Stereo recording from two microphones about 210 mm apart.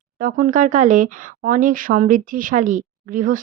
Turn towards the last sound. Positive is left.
turn(degrees=-40)  # may be behind; listen again after turning